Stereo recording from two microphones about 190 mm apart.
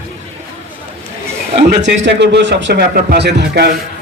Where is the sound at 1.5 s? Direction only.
65° right (ahead or behind).